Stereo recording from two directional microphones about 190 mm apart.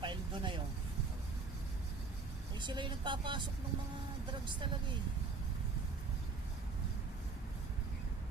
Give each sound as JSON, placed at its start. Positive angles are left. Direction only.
{"t": 0.0, "sound": "vehicle", "side_deg": -25}
{"t": 2.6, "sound": "speech", "side_deg": -25}